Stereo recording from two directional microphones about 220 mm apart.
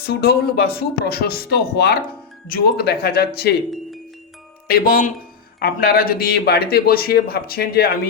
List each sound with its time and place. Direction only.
0.0 s a man's voice: 45° left (ahead or behind)
4.7 s a man's voice: 40° left (ahead or behind)